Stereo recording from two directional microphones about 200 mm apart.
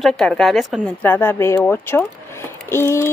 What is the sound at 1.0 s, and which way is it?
A woman's voice, 10° left (ahead or behind).